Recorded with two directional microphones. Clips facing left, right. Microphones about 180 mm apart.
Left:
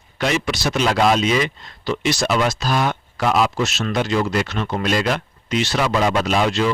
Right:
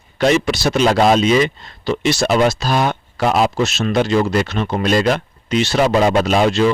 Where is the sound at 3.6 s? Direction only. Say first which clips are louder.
Right 5 dB; 30° right (ahead or behind).